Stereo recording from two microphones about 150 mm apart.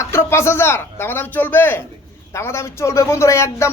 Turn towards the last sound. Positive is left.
turn(degrees=20)  # may be behind; listen again after turning